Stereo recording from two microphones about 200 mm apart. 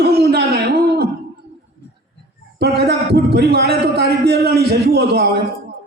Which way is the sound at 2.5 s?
55° right (ahead or behind).